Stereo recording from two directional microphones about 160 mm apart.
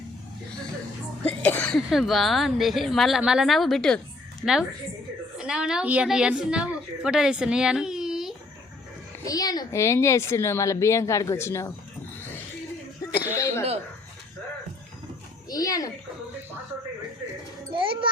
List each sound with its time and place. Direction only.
1.2 s a woman's voice: 10° left (ahead or behind)
9.2 s a woman's voice: 25° left (ahead or behind)
13.3 s speech: 20° left (ahead or behind)
15.4 s a child's voice: 20° left (ahead or behind)
17.7 s a child's voice: 30° right (ahead or behind)